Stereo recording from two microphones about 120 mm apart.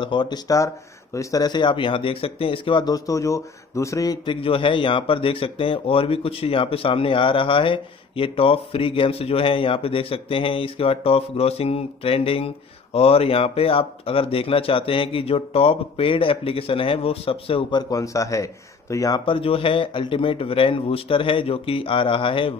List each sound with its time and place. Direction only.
0.0 s speech: 40° left (ahead or behind)
4.3 s a man's voice: 45° left (ahead or behind); by 19.2 s 30° left (ahead or behind)
19.2 s a man's voice: 50° left (ahead or behind)